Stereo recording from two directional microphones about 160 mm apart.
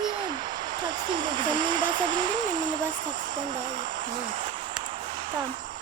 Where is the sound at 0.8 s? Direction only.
30° right (ahead or behind).